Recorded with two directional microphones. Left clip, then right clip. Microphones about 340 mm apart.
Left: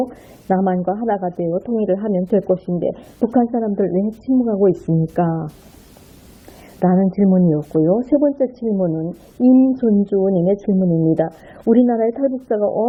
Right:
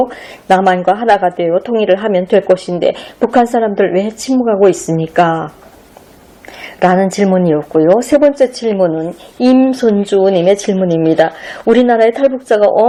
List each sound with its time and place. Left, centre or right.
0.1 s a woman's voice: centre
1.9 s a woman's voice: centre
2.6 s speech: right
2.9 s a woman's voice: centre
6.7 s a woman's voice: centre
11.2 s a woman's voice: centre